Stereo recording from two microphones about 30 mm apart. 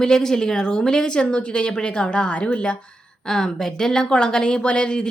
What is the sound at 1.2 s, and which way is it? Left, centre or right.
A woman's voice, left.